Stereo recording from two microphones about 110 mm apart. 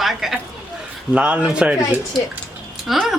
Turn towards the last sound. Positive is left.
turn(degrees=-5)  # may be behind; listen again after turning